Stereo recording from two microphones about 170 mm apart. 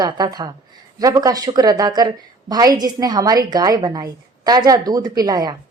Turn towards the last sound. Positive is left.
turn(degrees=-25)  # may be behind; listen again after turning